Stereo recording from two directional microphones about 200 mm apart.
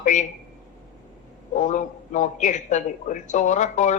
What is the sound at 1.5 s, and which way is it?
A woman's voice, 40° left (ahead or behind).